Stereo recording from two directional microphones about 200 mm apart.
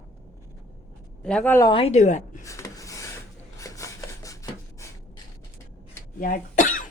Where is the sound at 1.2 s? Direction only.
5° left (ahead or behind).